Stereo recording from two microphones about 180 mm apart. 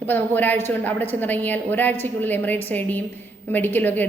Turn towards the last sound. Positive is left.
turn(degrees=10)  # may be behind; listen again after turning